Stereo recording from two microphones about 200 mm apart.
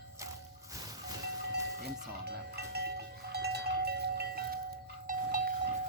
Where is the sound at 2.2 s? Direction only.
55° right (ahead or behind).